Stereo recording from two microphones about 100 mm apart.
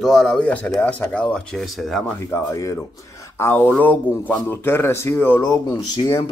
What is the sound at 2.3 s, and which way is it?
Speech, 30° left (ahead or behind).